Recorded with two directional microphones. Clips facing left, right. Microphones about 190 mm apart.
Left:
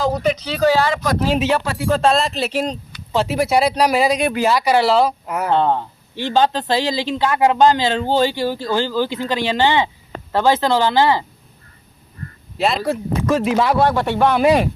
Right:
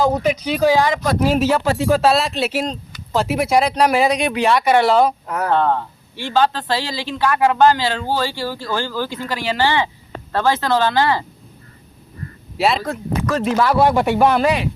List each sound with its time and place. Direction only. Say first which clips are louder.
0.1 s speech: right 1 dB; 10° right (ahead or behind)
1.3 s speech: right 1 dB; 5° right (ahead or behind)
1.6 s speech: right 5 dB; 25° right (ahead or behind)
1.9 s speech: left 1 dB; 5° right (ahead or behind); by 11.2 s 15° left (ahead or behind)
12.5 s speech: right 1 dB; centre (ahead or behind)
13.3 s speech: left 2 dB; 10° left (ahead or behind)
13.7 s speech: right 2 dB; 10° right (ahead or behind)